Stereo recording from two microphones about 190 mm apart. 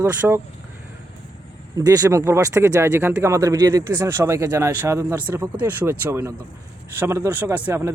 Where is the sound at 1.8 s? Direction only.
20° right (ahead or behind).